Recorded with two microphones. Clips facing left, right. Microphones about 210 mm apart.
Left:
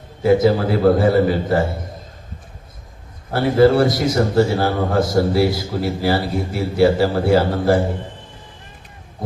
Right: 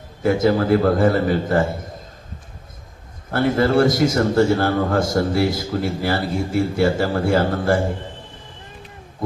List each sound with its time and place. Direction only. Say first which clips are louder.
0.2 s a man's voice: left 3 dB; 50° right (ahead or behind)
3.3 s a man's voice: left 3 dB; 50° right (ahead or behind)